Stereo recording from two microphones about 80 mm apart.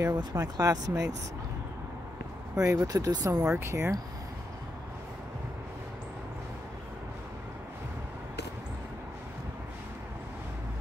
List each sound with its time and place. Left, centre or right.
0.2 s speech: right
2.5 s speech: right
2.9 s speech: right
3.5 s speech: right